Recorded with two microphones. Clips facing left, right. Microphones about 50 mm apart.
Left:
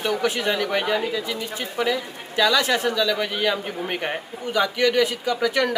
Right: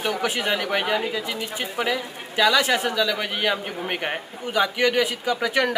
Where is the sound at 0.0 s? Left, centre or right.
Centre.